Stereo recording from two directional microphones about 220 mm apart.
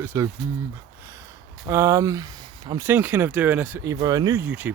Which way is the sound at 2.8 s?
5° right (ahead or behind).